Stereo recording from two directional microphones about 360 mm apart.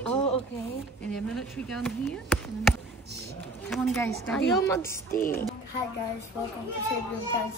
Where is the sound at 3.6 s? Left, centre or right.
Centre.